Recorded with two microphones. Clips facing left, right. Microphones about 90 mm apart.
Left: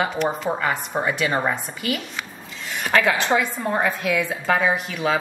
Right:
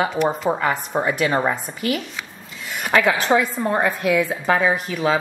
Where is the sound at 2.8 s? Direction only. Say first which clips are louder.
Right 1 dB; 10° right (ahead or behind).